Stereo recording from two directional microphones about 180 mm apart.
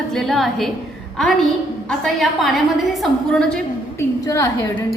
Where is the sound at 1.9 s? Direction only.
Centre (ahead or behind).